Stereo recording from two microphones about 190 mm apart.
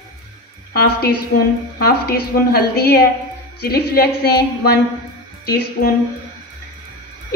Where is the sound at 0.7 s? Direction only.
55° left (ahead or behind).